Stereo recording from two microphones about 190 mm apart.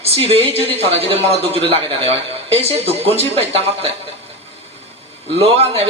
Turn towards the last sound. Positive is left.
turn(degrees=-30)  # may be behind; listen again after turning